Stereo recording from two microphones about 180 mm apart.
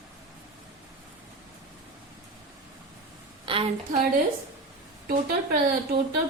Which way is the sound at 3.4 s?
30° right (ahead or behind).